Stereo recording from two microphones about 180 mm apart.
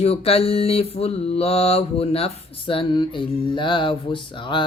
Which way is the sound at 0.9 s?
35° left (ahead or behind).